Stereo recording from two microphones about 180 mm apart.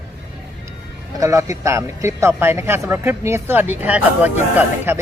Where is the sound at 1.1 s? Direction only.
15° right (ahead or behind).